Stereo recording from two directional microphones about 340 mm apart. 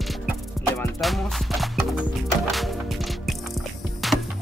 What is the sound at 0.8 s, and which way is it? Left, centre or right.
Speech, centre.